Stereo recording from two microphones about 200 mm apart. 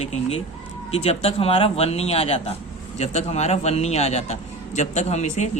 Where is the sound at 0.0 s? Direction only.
30° left (ahead or behind).